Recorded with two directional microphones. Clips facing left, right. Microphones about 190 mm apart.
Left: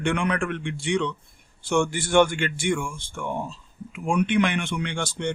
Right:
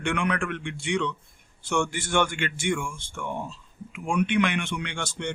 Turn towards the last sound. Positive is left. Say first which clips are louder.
# left 4 dB
turn(degrees=35)  # may be behind; listen again after turning